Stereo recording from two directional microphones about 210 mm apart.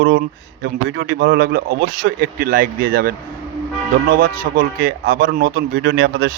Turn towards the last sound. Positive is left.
turn(degrees=-50)  # may be behind; listen again after turning